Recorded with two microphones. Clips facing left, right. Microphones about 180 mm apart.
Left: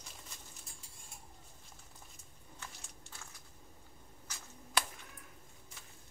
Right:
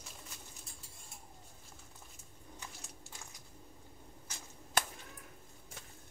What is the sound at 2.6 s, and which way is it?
Biting, 15° right (ahead or behind).